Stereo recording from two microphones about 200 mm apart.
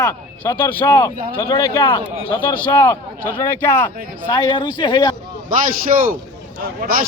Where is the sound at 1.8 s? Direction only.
25° left (ahead or behind).